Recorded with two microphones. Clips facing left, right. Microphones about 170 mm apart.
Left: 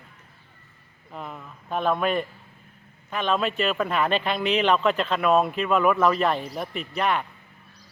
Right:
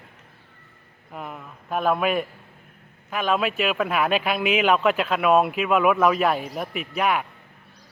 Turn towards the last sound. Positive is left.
turn(degrees=-5)  # may be behind; listen again after turning